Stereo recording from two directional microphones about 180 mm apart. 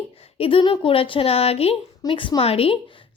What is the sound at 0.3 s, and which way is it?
A woman's voice, 30° left (ahead or behind).